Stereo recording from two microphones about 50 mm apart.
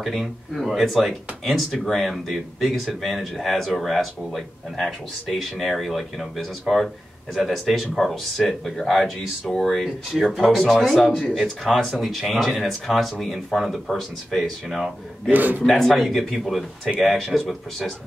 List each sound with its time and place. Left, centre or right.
0.0 s speech: centre
10.8 s speech: centre
15.3 s a man's voice: right
15.6 s speech: centre